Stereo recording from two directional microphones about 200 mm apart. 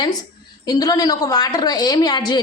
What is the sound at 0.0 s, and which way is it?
A woman's voice, 20° left (ahead or behind).